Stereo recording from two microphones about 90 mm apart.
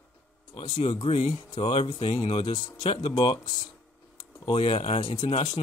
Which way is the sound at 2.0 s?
90° left.